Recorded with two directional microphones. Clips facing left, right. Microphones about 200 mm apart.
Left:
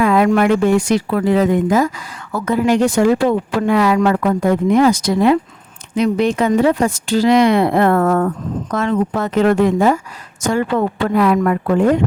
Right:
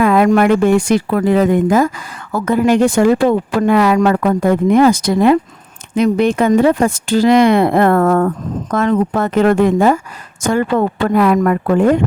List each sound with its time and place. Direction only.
0.0 s speech: 50° right (ahead or behind)